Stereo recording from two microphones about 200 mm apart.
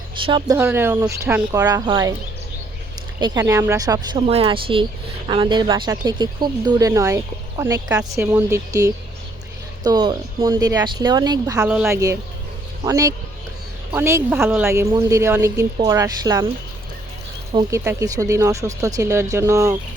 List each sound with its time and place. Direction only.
0.2 s speech: 25° right (ahead or behind)
0.5 s speech: 10° right (ahead or behind)
3.2 s speech: 20° right (ahead or behind)
11.6 s a woman's voice: 5° right (ahead or behind)
12.8 s speech: 15° right (ahead or behind)
17.5 s speech: 20° right (ahead or behind)